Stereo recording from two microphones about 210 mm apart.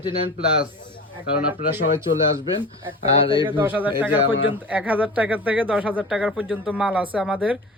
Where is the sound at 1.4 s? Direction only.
10° right (ahead or behind).